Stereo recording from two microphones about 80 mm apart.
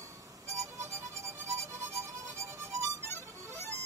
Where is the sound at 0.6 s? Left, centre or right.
Right.